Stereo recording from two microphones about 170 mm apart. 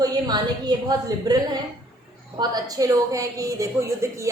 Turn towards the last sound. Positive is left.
turn(degrees=-15)  # may be behind; listen again after turning